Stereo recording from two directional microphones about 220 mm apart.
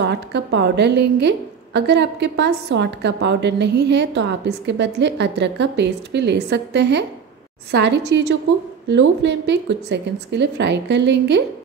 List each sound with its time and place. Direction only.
0.0 s a woman's voice: 50° right (ahead or behind)